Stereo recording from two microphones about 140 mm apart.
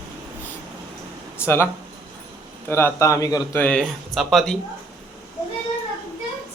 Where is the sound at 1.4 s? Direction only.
20° left (ahead or behind).